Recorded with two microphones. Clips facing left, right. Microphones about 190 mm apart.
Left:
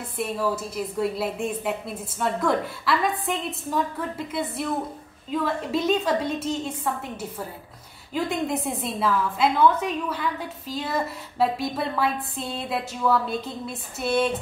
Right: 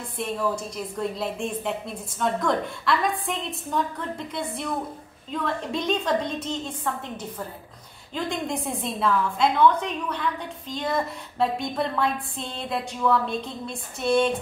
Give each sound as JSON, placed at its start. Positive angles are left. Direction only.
{"t": 0.2, "sound": "a woman's voice", "side_deg": 5}